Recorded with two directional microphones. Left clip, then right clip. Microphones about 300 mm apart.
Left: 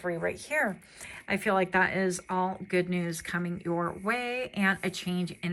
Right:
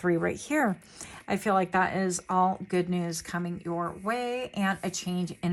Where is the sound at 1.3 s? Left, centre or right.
Centre.